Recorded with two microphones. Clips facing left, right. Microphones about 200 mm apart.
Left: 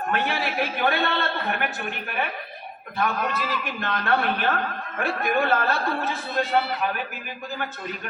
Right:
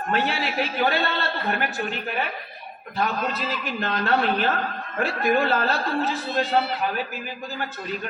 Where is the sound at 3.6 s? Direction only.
55° left (ahead or behind).